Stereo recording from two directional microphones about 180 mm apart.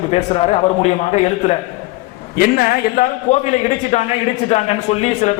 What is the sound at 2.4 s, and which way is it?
Speech, 55° left (ahead or behind).